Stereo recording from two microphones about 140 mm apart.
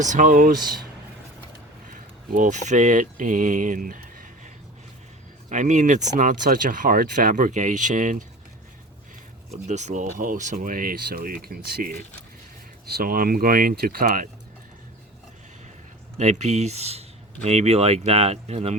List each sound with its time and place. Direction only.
0.0 s speech: 65° right (ahead or behind)
2.3 s speech: 60° right (ahead or behind)
5.5 s speech: 60° right (ahead or behind)
9.6 s speech: 55° right (ahead or behind); by 14.3 s 90° right
16.1 s speech: 55° right (ahead or behind)